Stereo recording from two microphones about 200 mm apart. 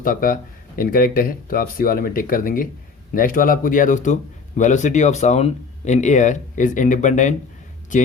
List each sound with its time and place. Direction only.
0.0 s speech: 45° left (ahead or behind)